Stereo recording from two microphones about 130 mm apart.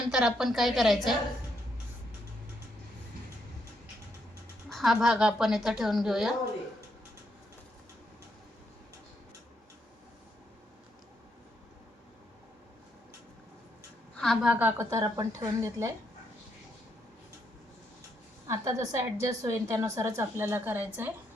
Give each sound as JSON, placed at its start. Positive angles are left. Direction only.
{"t": 0.1, "sound": "a woman's voice", "side_deg": -5}
{"t": 4.7, "sound": "a woman's voice", "side_deg": 0}
{"t": 14.2, "sound": "a woman's voice", "side_deg": 5}
{"t": 14.5, "sound": "a woman's voice", "side_deg": -15}
{"t": 18.4, "sound": "a woman's voice", "side_deg": -25}